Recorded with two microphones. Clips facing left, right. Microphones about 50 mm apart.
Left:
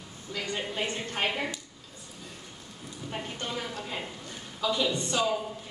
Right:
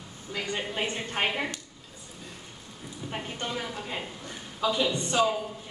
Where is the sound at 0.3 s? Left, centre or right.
Centre.